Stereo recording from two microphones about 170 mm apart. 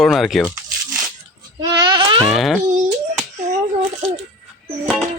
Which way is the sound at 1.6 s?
20° right (ahead or behind).